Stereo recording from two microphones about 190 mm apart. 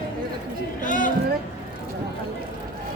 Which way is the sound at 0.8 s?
45° left (ahead or behind).